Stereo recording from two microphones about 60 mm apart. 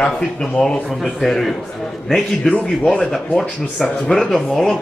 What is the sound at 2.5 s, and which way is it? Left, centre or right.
Speech, centre.